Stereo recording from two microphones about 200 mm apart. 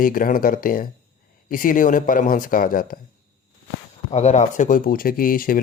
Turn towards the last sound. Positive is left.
turn(degrees=45)  # may be behind; listen again after turning